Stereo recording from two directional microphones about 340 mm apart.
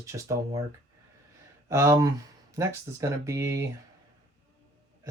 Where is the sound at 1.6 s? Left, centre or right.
Centre.